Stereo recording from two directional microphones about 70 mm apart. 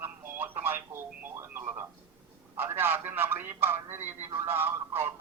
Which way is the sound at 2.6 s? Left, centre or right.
Right.